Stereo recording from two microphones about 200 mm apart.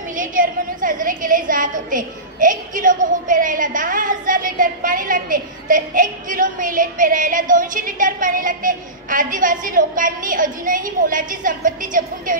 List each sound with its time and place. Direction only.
0.1 s a woman's voice: 40° right (ahead or behind)